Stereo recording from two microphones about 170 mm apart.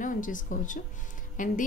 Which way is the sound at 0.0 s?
50° left (ahead or behind).